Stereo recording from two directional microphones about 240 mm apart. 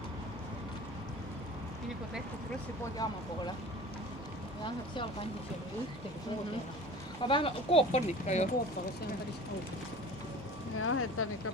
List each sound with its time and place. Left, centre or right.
3.0 s speech: centre
7.2 s speech: left
10.8 s speech: left